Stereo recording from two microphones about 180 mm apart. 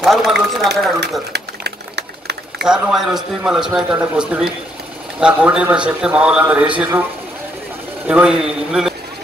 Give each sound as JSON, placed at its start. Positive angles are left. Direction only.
{"t": 0.0, "sound": "a man's voice", "side_deg": 0}
{"t": 1.3, "sound": "a sound", "side_deg": -65}
{"t": 2.6, "sound": "a man's voice", "side_deg": -5}
{"t": 8.1, "sound": "a man's voice", "side_deg": -5}